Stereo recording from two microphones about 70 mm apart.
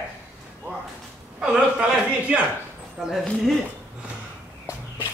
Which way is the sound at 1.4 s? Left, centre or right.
Centre.